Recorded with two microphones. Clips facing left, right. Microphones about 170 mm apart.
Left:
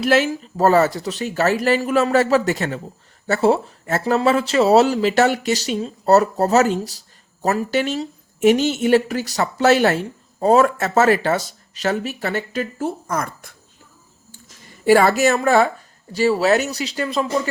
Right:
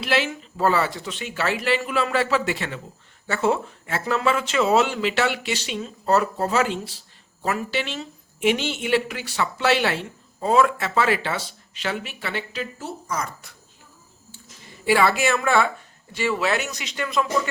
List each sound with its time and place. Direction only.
0.0 s speech: 45° left (ahead or behind)
14.8 s speech: 45° left (ahead or behind)